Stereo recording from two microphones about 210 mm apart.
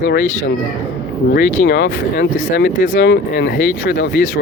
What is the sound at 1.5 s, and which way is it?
Speech, 50° left (ahead or behind).